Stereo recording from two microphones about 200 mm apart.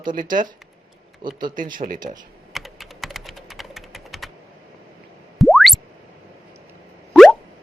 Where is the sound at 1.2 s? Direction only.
20° right (ahead or behind).